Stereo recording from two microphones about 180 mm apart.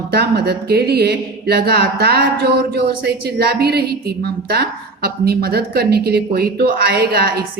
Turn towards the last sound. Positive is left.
turn(degrees=-60)  # may be behind; listen again after turning